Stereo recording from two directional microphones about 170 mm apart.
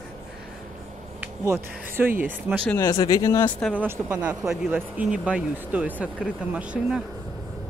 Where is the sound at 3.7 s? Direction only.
10° right (ahead or behind).